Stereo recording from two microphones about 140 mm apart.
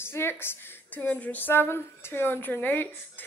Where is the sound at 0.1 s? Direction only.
15° left (ahead or behind).